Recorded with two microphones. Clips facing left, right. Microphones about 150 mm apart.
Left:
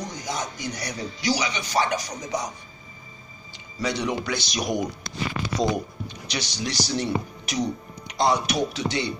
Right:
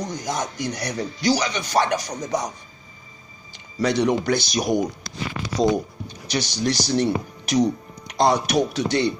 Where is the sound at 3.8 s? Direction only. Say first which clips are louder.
Right 7 dB; 50° right (ahead or behind).